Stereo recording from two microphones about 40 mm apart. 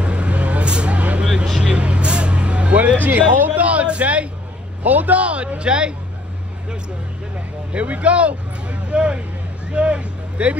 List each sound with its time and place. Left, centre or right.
0.0 s vehicle: right
1.2 s vehicle: centre
3.0 s a sound: right
4.8 s speech: right
5.2 s speech: right
7.7 s speech: right